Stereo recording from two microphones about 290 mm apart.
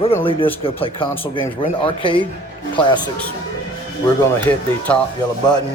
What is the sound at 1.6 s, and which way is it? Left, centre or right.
Speech, centre.